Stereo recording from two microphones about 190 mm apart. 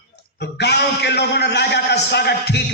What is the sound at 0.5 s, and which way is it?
A man's voice, 60° left (ahead or behind).